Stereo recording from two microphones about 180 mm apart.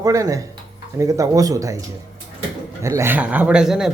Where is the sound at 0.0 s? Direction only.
20° right (ahead or behind).